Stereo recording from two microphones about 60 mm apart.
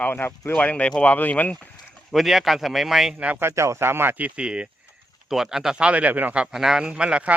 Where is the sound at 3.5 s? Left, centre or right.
Right.